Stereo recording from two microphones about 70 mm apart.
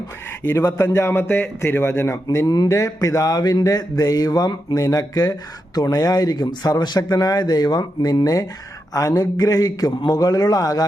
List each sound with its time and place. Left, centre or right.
0.4 s a man's voice: left
2.6 s speech: left